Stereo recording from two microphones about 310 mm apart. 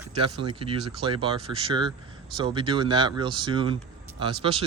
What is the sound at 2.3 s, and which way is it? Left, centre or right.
Speech, centre.